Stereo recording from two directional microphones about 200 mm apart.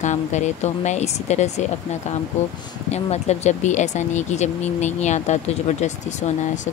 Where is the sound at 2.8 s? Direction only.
35° left (ahead or behind).